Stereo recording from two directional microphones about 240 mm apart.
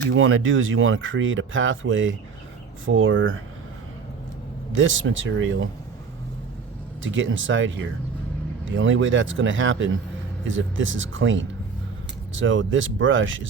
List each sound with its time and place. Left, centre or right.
0.1 s speech: right
4.7 s speech: right
7.0 s speech: right